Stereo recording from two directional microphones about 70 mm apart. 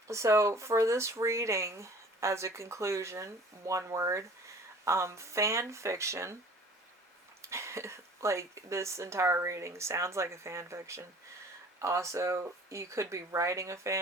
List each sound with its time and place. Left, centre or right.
0.1 s speech: right
7.4 s speech: right